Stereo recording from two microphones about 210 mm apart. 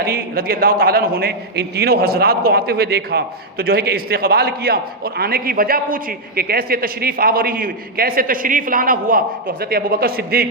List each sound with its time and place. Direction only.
0.0 s a man's voice: 45° right (ahead or behind)